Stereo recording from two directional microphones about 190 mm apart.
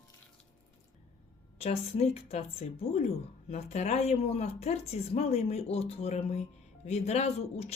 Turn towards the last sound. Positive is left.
turn(degrees=35)  # may be behind; listen again after turning